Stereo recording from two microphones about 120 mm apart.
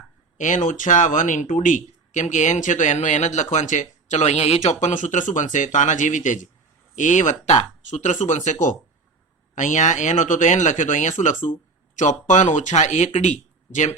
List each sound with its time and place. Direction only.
0.3 s speech: 90° left; by 13.1 s 75° left (ahead or behind)
13.7 s speech: 90° left